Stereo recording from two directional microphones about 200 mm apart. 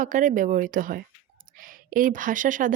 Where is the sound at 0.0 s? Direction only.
40° right (ahead or behind).